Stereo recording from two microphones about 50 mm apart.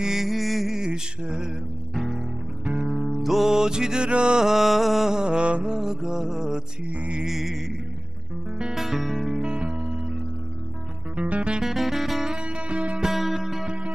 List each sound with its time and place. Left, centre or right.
0.0 s music: centre
0.7 s mantra: centre
2.0 s music: centre
4.5 s music: centre; by 5.8 s right
5.8 s music: centre
6.9 s music: right
7.2 s music: centre
8.7 s music: centre
9.4 s music: centre
11.1 s music: right
11.6 s music: centre
12.4 s music: right
13.0 s music: centre